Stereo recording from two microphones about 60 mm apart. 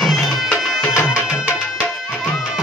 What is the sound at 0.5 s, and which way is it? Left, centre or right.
Music, centre.